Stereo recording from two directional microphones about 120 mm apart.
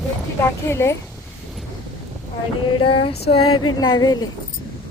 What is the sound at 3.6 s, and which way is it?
Speech, 35° left (ahead or behind).